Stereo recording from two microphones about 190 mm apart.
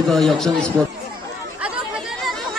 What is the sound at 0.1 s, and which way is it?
Speech, centre (ahead or behind).